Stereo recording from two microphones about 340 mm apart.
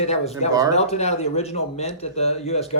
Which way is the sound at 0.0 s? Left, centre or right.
Centre.